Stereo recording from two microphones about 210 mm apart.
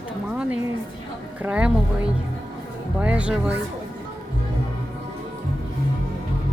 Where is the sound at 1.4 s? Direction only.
5° right (ahead or behind).